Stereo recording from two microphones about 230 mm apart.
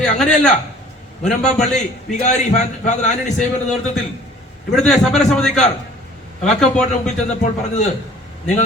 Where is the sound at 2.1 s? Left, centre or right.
Left.